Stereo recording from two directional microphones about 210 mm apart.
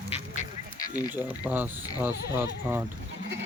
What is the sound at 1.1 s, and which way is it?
Speech, 10° right (ahead or behind).